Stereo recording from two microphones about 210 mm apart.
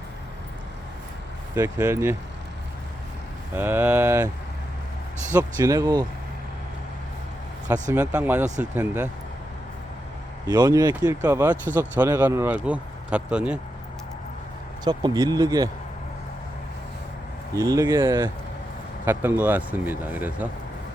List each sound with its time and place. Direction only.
1.5 s speech: 10° right (ahead or behind)
3.5 s speech: 10° right (ahead or behind)
5.3 s speech: 15° right (ahead or behind)
7.7 s speech: 10° right (ahead or behind)
10.4 s speech: 20° right (ahead or behind)
14.8 s speech: 20° right (ahead or behind)
17.5 s speech: 15° right (ahead or behind)